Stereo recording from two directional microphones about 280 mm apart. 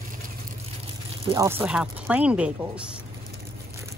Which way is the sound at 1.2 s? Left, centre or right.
Centre.